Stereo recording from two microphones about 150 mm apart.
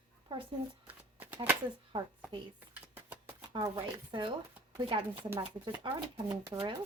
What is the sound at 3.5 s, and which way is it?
Speech, 25° right (ahead or behind).